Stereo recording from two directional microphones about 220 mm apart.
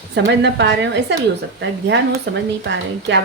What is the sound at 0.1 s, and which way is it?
Speech, 50° right (ahead or behind).